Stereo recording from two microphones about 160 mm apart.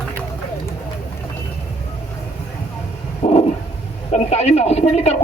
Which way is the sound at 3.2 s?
40° left (ahead or behind).